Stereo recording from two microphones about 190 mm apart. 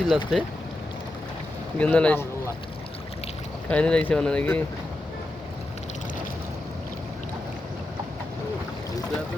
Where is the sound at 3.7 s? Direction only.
5° left (ahead or behind).